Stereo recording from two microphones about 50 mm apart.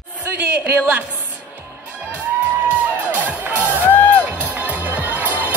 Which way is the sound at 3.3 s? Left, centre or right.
Right.